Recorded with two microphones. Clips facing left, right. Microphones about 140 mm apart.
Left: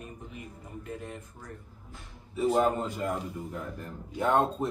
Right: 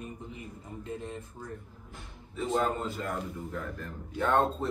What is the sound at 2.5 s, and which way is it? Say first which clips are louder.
A man's voice: left 4 dB; 10° left (ahead or behind).